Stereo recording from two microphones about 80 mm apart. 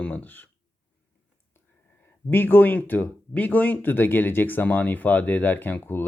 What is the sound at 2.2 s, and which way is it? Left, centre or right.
Speech, left.